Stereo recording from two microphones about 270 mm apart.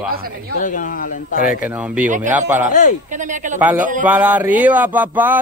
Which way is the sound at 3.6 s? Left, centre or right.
Centre.